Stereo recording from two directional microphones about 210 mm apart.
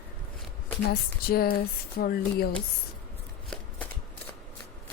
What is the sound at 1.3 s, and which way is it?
Speech, 45° left (ahead or behind).